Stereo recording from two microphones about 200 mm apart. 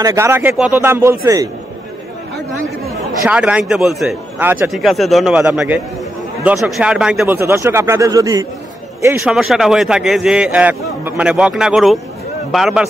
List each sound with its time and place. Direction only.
0.0 s speech: 15° right (ahead or behind)
3.3 s a man's voice: 5° right (ahead or behind)
9.2 s a man's voice: centre (ahead or behind)